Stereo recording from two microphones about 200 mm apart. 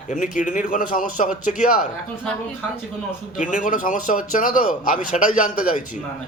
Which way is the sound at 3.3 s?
40° left (ahead or behind).